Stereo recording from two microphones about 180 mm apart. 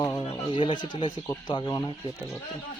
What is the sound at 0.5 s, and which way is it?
Speech, 25° left (ahead or behind).